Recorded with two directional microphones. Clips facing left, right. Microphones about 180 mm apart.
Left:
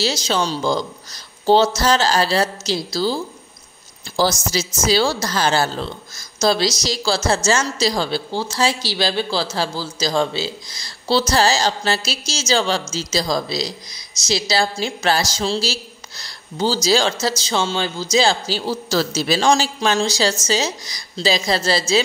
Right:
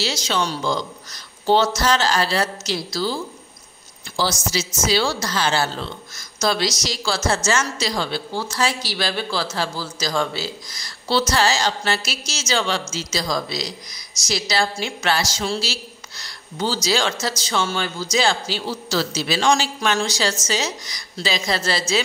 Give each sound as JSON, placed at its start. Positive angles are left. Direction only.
{"t": 0.0, "sound": "a woman's voice", "side_deg": 35}
{"t": 4.2, "sound": "a woman's voice", "side_deg": 45}